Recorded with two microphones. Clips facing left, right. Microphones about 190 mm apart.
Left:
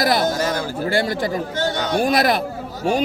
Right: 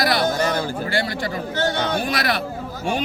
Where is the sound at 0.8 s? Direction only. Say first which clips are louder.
Left 4 dB; 50° left (ahead or behind).